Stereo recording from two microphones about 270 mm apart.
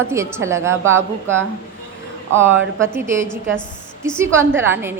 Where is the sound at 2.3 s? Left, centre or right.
Centre.